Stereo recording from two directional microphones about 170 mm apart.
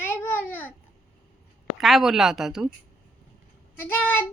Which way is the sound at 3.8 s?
10° left (ahead or behind).